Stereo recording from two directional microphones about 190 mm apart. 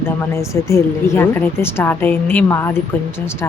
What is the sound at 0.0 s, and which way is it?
A woman's voice, 15° left (ahead or behind).